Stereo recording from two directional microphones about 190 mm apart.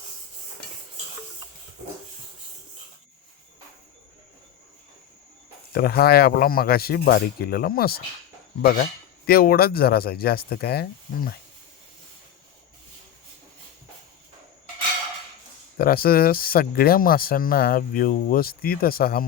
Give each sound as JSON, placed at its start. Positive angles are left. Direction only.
{"t": 5.7, "sound": "speech", "side_deg": 55}
{"t": 15.8, "sound": "speech", "side_deg": 50}